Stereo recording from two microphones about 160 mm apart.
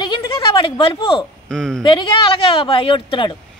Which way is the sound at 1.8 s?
30° left (ahead or behind).